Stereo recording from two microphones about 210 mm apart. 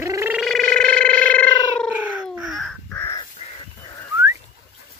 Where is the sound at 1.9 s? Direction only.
5° right (ahead or behind); by 3.2 s 10° left (ahead or behind).